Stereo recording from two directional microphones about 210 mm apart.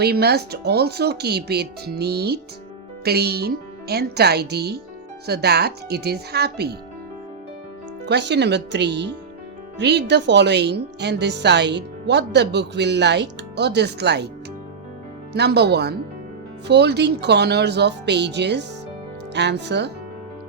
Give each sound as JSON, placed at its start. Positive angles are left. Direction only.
{"t": 0.0, "sound": "speech", "side_deg": -50}
{"t": 8.0, "sound": "speech", "side_deg": -55}
{"t": 15.3, "sound": "speech", "side_deg": -55}